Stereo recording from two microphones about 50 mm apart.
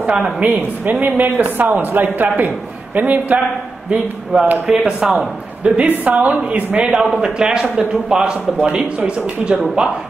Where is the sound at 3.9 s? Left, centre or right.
Centre.